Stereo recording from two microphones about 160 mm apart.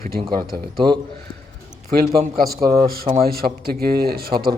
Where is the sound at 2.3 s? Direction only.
70° right (ahead or behind).